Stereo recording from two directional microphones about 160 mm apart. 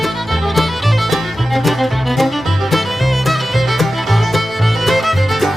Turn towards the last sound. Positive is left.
turn(degrees=0)  # may be behind; listen again after turning